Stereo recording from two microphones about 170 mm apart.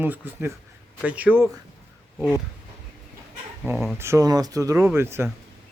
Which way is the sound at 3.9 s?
15° right (ahead or behind).